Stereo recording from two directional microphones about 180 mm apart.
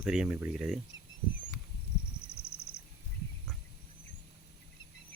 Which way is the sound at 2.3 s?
65° left (ahead or behind).